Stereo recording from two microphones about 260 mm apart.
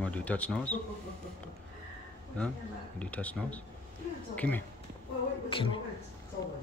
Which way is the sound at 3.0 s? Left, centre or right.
Centre.